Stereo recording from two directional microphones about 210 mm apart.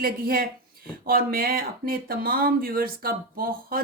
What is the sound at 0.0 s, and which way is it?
Speech, 45° right (ahead or behind).